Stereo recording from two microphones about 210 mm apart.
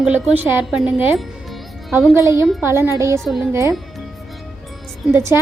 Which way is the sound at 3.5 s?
15° right (ahead or behind).